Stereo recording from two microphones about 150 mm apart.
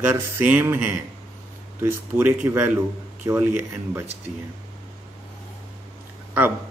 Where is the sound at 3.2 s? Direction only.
25° right (ahead or behind).